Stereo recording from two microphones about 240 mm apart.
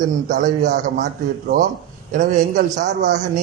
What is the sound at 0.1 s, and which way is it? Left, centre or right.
Speech, right.